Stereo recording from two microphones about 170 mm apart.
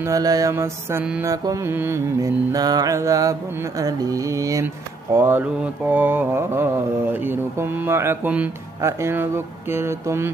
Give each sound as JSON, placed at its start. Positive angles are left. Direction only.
{"t": 0.1, "sound": "mantra", "side_deg": -20}
{"t": 5.1, "sound": "speech", "side_deg": -10}